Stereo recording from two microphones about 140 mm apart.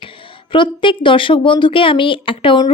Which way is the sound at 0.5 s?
35° left (ahead or behind).